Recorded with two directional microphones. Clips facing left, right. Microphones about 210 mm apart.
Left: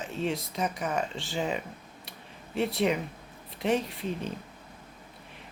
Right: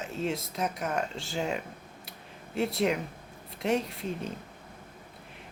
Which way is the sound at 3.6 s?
Centre (ahead or behind).